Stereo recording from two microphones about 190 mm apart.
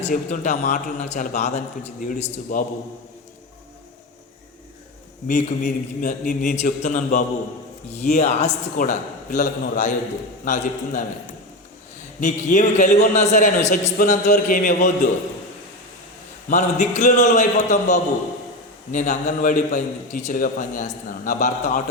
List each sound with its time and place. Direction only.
0.0 s a man's voice: 40° left (ahead or behind)
5.3 s a man's voice: 40° left (ahead or behind)
12.2 s a man's voice: 40° left (ahead or behind)
16.5 s a man's voice: 40° left (ahead or behind)